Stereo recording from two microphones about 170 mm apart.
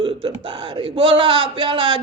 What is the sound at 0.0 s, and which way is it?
Speech, 30° right (ahead or behind).